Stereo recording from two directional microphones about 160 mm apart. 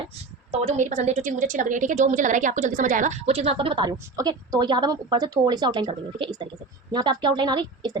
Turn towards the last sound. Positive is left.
turn(degrees=-25)  # may be behind; listen again after turning